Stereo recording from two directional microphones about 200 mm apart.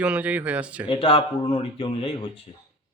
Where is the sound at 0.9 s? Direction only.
25° left (ahead or behind).